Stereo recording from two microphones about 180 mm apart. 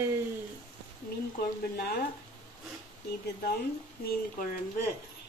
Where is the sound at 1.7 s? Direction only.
60° left (ahead or behind).